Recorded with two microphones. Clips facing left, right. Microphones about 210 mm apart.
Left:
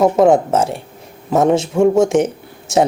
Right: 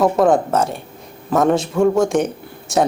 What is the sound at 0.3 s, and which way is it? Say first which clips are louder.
Speech: left 3 dB; 25° left (ahead or behind).